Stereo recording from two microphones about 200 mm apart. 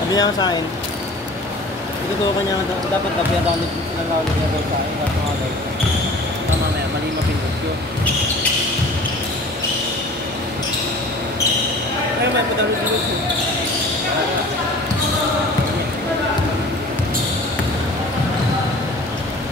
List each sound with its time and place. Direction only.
0.1 s speech: 20° left (ahead or behind)